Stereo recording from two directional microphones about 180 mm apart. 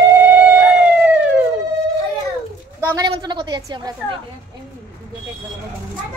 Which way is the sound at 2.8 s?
25° right (ahead or behind).